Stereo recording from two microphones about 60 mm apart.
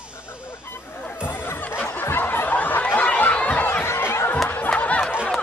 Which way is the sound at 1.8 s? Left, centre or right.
Left.